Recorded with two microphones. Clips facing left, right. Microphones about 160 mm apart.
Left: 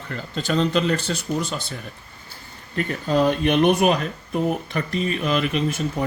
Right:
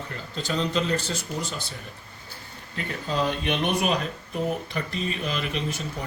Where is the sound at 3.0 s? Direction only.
50° left (ahead or behind).